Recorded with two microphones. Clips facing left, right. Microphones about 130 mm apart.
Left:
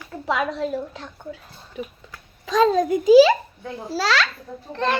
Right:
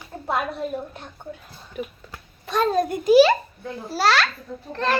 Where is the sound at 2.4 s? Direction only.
90° left.